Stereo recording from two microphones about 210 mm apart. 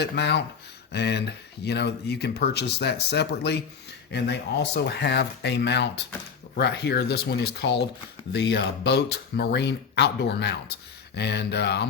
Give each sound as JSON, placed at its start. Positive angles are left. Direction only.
{"t": 0.0, "sound": "speech", "side_deg": 55}